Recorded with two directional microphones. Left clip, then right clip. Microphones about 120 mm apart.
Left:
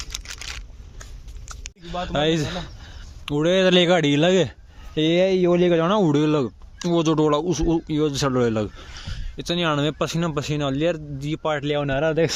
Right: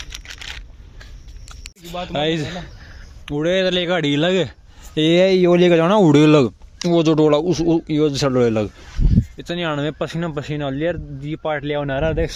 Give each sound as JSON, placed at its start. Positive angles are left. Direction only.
{"t": 0.0, "sound": "a sound", "side_deg": 25}
{"t": 1.8, "sound": "speech", "side_deg": 10}
{"t": 5.0, "sound": "speech", "side_deg": -35}
{"t": 6.1, "sound": "speech", "side_deg": -45}
{"t": 6.7, "sound": "speech", "side_deg": -20}
{"t": 9.4, "sound": "speech", "side_deg": 35}